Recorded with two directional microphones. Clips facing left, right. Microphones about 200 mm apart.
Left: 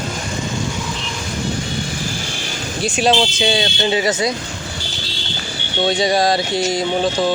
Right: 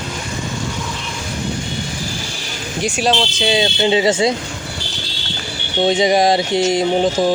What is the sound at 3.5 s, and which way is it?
Speech, 20° right (ahead or behind).